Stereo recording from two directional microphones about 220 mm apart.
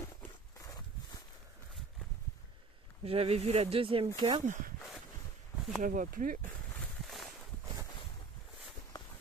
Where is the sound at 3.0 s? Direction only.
25° right (ahead or behind).